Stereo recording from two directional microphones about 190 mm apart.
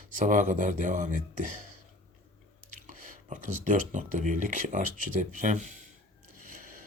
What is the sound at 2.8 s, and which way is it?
Speech, 40° right (ahead or behind).